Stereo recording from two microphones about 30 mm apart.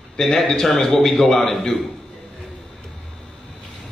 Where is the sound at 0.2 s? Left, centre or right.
Left.